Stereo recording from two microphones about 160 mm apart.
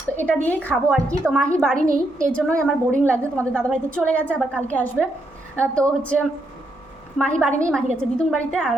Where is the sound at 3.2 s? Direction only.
15° right (ahead or behind).